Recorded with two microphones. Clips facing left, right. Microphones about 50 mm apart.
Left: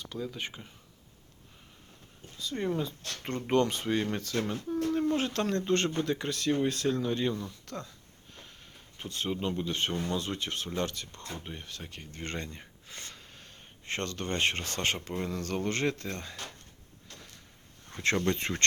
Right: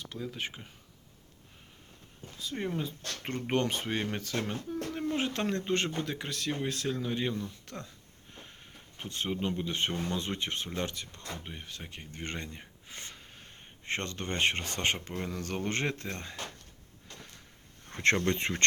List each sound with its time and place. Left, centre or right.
0.0 s speech: centre
2.4 s speech: centre
4.9 s speech: centre
8.3 s a sound: right
9.6 s speech: centre
10.7 s speech: centre
17.9 s speech: right
18.3 s speech: right